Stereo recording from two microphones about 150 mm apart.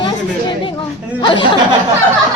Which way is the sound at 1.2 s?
35° left (ahead or behind).